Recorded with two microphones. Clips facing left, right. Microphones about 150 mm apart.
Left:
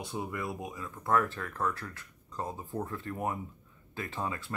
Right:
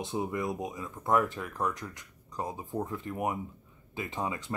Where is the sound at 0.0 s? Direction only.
20° right (ahead or behind).